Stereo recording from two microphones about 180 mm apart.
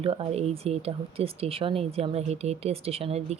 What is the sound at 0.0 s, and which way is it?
Speech, 30° right (ahead or behind).